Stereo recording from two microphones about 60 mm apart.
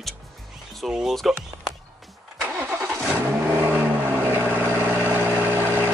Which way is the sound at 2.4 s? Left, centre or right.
Right.